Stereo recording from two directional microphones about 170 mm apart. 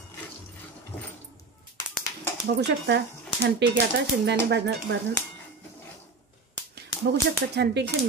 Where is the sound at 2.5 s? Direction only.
85° right.